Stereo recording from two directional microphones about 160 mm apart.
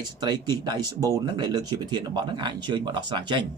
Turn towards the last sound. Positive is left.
turn(degrees=-30)  # may be behind; listen again after turning